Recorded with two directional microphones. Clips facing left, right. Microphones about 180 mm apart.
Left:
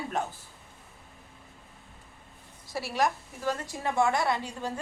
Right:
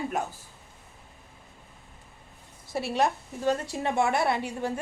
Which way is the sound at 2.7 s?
20° right (ahead or behind).